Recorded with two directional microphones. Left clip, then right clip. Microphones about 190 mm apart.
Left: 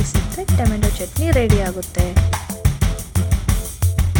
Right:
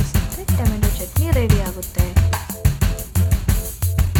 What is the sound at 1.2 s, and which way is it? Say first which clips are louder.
Speech: left 5 dB; 15° left (ahead or behind).